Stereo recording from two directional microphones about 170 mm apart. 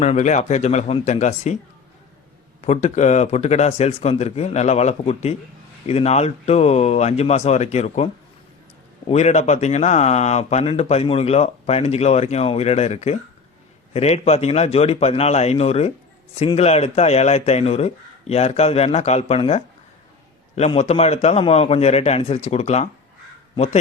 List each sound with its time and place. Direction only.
0.0 s speech: 45° left (ahead or behind)
2.6 s speech: 40° left (ahead or behind)